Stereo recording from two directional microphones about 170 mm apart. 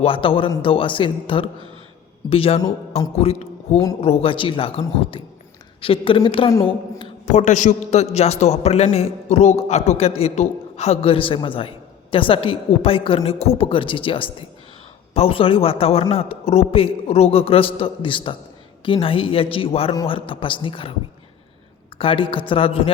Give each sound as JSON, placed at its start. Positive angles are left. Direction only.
{"t": 0.0, "sound": "a man's voice", "side_deg": 30}
{"t": 6.5, "sound": "a woman's voice", "side_deg": 20}
{"t": 7.3, "sound": "a man's voice", "side_deg": 45}
{"t": 21.9, "sound": "a man's voice", "side_deg": 30}